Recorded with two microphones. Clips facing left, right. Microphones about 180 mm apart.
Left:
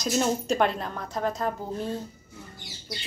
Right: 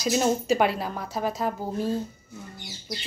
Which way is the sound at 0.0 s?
5° right (ahead or behind).